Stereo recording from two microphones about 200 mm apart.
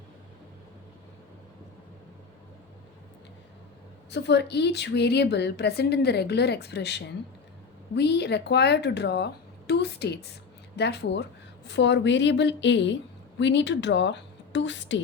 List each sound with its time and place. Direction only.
4.1 s a woman's voice: 60° left (ahead or behind)